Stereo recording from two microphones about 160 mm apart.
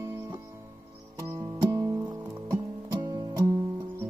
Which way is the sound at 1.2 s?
15° right (ahead or behind).